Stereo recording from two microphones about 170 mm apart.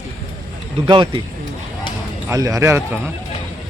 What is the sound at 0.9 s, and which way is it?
Speech, 30° right (ahead or behind).